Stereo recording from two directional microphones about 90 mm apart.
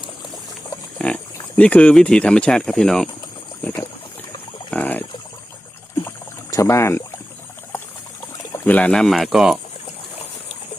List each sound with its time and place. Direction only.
0.9 s speech: 10° left (ahead or behind)
4.7 s a sound: 20° left (ahead or behind)
6.1 s rowboat: 35° left (ahead or behind)
8.6 s speech: 15° left (ahead or behind)
9.0 s speech: centre (ahead or behind)